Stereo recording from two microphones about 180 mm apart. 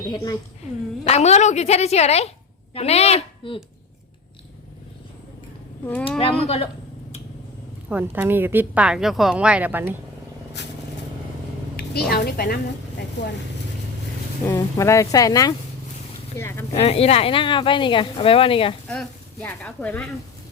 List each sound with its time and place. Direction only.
0.1 s speech: 20° left (ahead or behind)
1.0 s speech: 35° left (ahead or behind)
5.8 s speech: 10° left (ahead or behind)
6.1 s speech: 30° left (ahead or behind)
7.9 s speech: 10° right (ahead or behind)
11.8 s a woman's voice: 60° left (ahead or behind)
13.2 s speech: 75° left (ahead or behind)
14.4 s speech: 15° left (ahead or behind)
16.7 s speech: 35° left (ahead or behind)
18.9 s speech: 10° left (ahead or behind)